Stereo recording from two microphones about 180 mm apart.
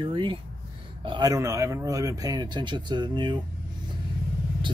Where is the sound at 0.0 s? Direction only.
25° right (ahead or behind).